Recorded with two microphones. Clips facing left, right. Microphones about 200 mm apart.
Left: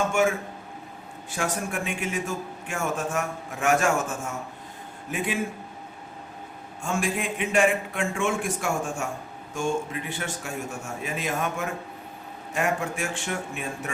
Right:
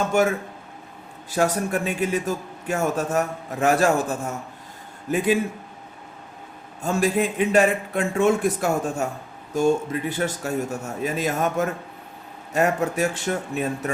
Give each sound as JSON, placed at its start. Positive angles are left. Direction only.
{"t": 0.1, "sound": "a man's voice", "side_deg": -40}
{"t": 6.8, "sound": "a man's voice", "side_deg": -35}